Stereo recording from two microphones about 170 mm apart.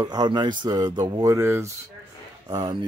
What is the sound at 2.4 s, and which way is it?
Speech, 25° right (ahead or behind).